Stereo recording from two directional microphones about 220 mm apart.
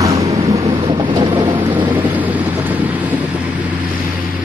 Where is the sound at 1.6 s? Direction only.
10° right (ahead or behind).